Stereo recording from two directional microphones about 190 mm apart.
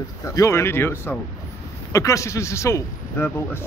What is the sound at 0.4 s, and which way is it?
A man's voice, 15° left (ahead or behind).